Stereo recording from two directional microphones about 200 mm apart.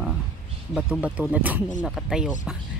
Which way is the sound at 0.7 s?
5° right (ahead or behind).